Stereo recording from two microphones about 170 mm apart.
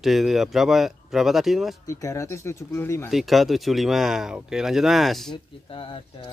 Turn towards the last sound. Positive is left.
turn(degrees=30)  # may be behind; listen again after turning